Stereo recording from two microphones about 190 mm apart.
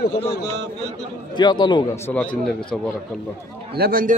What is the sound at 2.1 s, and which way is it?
Speech, 5° left (ahead or behind).